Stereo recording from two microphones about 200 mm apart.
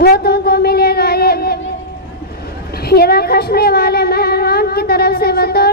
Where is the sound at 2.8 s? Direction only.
50° left (ahead or behind).